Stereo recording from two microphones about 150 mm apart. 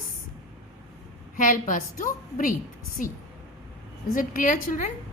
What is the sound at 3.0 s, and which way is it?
Speech, 60° left (ahead or behind).